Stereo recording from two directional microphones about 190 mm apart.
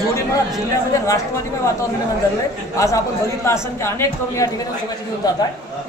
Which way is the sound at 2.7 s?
15° left (ahead or behind).